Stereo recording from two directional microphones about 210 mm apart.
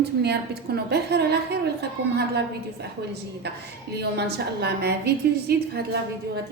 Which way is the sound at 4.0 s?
50° right (ahead or behind).